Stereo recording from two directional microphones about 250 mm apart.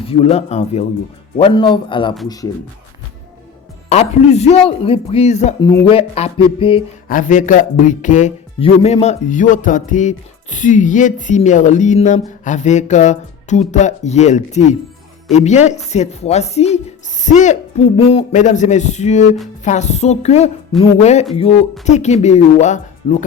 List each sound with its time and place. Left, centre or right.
0.0 s speech: left
3.8 s speech: left
5.5 s speech: centre
7.1 s speech: left